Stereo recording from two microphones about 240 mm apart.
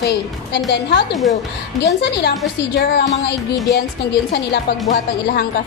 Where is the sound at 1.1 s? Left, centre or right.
Centre.